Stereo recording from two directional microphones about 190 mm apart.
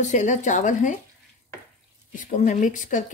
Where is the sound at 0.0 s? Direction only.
40° left (ahead or behind).